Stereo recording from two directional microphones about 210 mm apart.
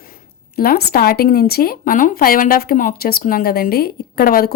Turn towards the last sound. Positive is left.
turn(degrees=45)  # may be behind; listen again after turning